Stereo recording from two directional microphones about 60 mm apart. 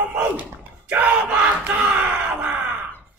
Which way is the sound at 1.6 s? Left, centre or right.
Centre.